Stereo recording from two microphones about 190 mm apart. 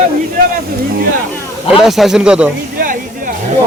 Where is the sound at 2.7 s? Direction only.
45° right (ahead or behind).